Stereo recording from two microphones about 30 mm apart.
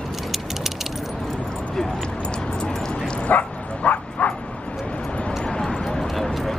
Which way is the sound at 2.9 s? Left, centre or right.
Left.